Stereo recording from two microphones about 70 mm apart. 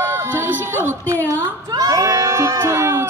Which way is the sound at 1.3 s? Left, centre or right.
Right.